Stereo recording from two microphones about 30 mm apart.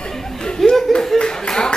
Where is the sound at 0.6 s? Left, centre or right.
Centre.